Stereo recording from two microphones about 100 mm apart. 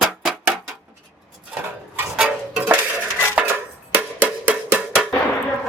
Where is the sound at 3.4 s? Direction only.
20° right (ahead or behind).